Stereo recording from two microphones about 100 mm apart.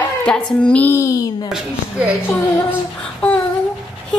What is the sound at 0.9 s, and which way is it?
Speech, 35° left (ahead or behind).